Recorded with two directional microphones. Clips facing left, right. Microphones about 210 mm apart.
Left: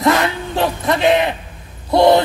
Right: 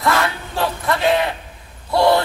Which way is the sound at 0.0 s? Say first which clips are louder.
Left 4 dB; 20° left (ahead or behind).